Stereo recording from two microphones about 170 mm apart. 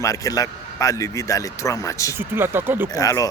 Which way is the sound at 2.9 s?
20° left (ahead or behind).